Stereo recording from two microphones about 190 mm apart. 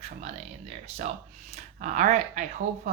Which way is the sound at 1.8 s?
40° right (ahead or behind).